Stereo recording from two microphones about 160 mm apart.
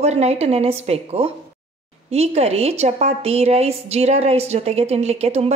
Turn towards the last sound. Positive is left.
turn(degrees=-40)  # may be behind; listen again after turning